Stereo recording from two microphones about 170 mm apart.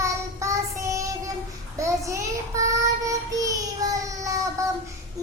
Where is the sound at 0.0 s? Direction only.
20° right (ahead or behind).